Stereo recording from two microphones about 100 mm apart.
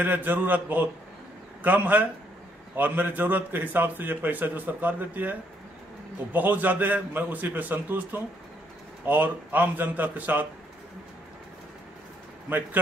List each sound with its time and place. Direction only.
0.0 s a man's voice: 20° right (ahead or behind)